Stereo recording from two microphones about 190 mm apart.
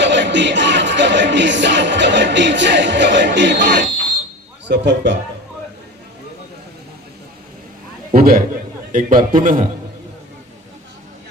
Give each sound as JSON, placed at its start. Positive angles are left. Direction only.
{"t": 0.0, "sound": "music", "side_deg": -70}
{"t": 4.7, "sound": "speech", "side_deg": -65}
{"t": 8.1, "sound": "a man's voice", "side_deg": -50}